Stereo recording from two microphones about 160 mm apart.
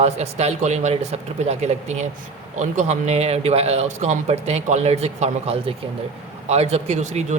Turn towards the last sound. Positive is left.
turn(degrees=-45)  # may be behind; listen again after turning